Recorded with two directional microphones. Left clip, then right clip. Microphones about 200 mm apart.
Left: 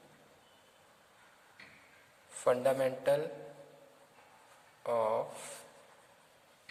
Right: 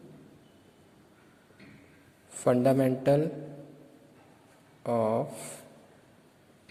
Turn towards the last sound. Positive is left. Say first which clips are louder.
# right 4 dB
turn(degrees=-15)  # may be behind; listen again after turning